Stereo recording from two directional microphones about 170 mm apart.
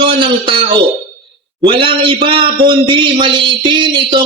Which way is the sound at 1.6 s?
30° right (ahead or behind).